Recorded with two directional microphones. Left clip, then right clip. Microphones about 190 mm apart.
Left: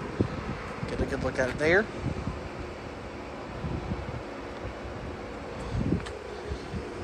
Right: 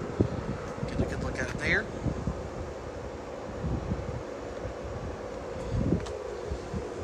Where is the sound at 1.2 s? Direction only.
5° right (ahead or behind).